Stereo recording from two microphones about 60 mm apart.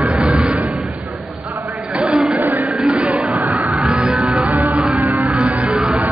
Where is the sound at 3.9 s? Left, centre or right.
Centre.